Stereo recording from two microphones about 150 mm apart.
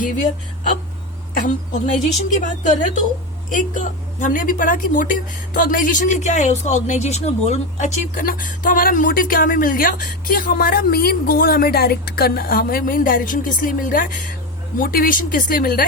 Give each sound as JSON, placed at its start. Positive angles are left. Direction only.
{"t": 1.3, "sound": "a woman's voice", "side_deg": 60}